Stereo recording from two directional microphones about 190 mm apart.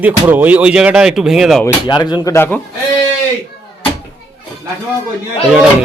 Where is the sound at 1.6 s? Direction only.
20° left (ahead or behind).